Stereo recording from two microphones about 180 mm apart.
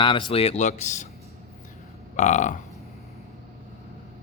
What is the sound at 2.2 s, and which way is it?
Speech, 40° left (ahead or behind).